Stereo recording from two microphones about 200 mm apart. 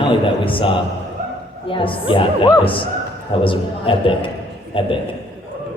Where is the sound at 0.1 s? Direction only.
25° left (ahead or behind).